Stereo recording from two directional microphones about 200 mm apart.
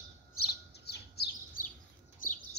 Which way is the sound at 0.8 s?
55° left (ahead or behind).